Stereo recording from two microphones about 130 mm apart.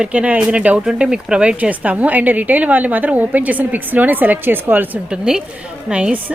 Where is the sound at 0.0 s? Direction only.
10° right (ahead or behind).